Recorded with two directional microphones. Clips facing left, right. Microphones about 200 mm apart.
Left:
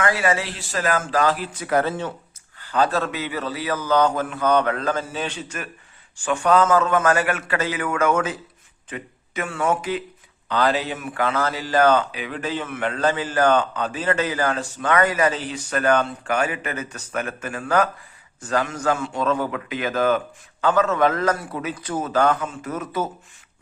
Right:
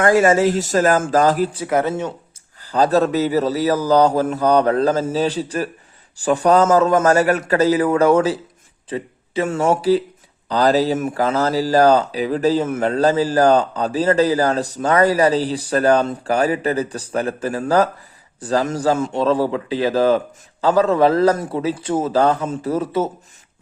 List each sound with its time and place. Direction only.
0.0 s speech: 45° right (ahead or behind)
1.6 s speech: 20° right (ahead or behind)
2.6 s speech: 35° right (ahead or behind)